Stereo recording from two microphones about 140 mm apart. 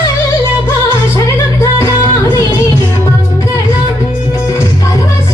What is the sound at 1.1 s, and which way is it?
Music, 20° left (ahead or behind).